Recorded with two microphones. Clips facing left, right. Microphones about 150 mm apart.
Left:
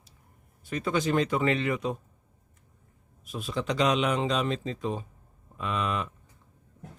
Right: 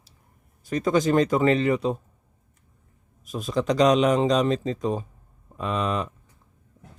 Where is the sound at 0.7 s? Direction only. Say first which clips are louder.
Right 6 dB; 40° right (ahead or behind).